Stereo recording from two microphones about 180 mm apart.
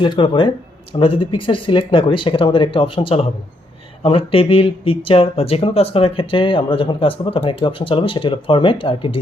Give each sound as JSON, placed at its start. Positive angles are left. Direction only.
{"t": 0.0, "sound": "speech", "side_deg": 25}